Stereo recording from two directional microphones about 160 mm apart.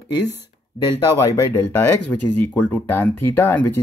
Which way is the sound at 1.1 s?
20° left (ahead or behind).